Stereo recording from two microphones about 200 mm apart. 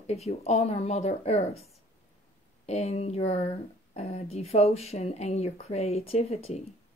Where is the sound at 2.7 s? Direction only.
30° left (ahead or behind).